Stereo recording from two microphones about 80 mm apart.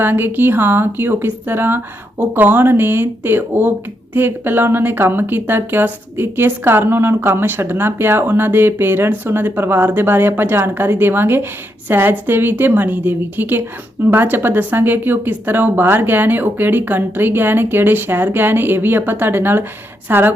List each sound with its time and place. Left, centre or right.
0.0 s a woman's voice: right